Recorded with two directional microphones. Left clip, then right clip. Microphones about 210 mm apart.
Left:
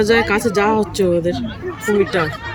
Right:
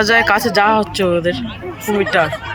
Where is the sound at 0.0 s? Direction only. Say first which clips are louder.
Right 2 dB; 5° left (ahead or behind).